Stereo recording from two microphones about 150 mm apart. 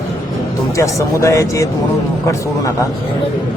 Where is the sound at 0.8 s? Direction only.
20° left (ahead or behind).